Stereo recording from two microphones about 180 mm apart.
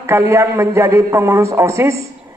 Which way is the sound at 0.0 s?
15° right (ahead or behind).